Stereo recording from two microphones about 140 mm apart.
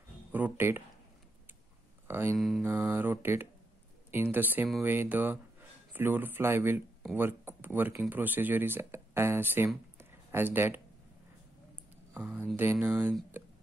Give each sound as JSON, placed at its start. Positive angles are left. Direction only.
{"t": 0.3, "sound": "speech", "side_deg": -15}
{"t": 2.0, "sound": "speech", "side_deg": -15}
{"t": 2.3, "sound": "mantra", "side_deg": 0}
{"t": 2.6, "sound": "speech", "side_deg": -15}
{"t": 9.9, "sound": "a sound", "side_deg": -15}
{"t": 12.1, "sound": "a sound", "side_deg": -15}
{"t": 12.8, "sound": "speech", "side_deg": -15}
{"t": 13.4, "sound": "music", "side_deg": -15}